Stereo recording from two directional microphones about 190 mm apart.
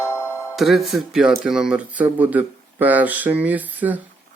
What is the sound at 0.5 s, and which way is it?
Speech, centre (ahead or behind).